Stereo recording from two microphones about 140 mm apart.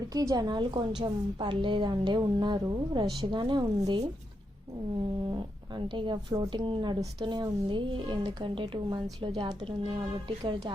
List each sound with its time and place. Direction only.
0.1 s a woman's voice: 25° right (ahead or behind)
6.0 s a woman's voice: 30° right (ahead or behind)